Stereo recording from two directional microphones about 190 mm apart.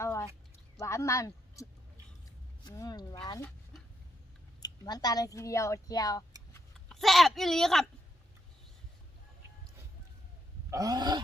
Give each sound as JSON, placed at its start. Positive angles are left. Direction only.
{"t": 0.0, "sound": "a sound", "side_deg": 15}
{"t": 0.8, "sound": "speech", "side_deg": 15}
{"t": 2.6, "sound": "speech", "side_deg": 20}
{"t": 4.6, "sound": "speech", "side_deg": 20}
{"t": 6.7, "sound": "speech", "side_deg": 5}
{"t": 10.7, "sound": "grunt", "side_deg": -20}